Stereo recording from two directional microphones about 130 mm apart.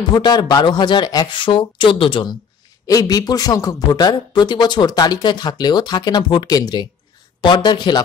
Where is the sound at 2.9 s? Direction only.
25° left (ahead or behind).